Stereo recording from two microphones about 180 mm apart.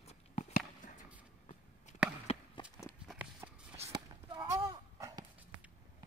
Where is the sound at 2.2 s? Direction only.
35° left (ahead or behind).